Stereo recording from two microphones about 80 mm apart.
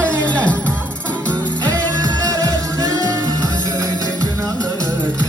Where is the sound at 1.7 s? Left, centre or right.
Right.